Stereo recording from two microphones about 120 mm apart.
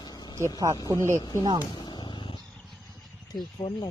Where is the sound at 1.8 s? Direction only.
40° left (ahead or behind).